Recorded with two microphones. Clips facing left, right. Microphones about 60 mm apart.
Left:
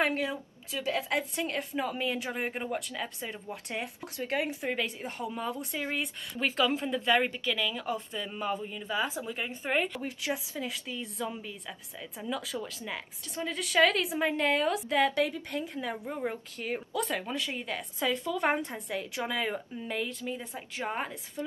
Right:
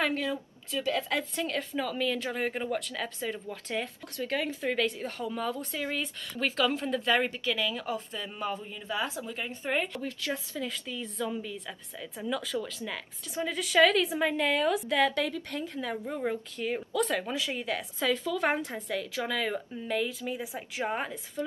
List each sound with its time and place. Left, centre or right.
0.0 s a woman's voice: left
7.4 s a woman's voice: centre
10.0 s a woman's voice: centre
15.2 s a woman's voice: centre
19.9 s a woman's voice: centre
21.4 s a woman's voice: centre